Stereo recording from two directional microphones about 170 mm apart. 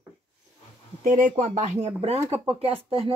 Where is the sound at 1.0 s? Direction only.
45° right (ahead or behind).